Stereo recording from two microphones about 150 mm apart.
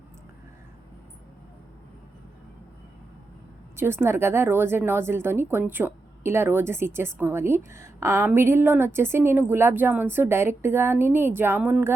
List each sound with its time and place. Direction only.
3.8 s a woman's voice: 15° right (ahead or behind)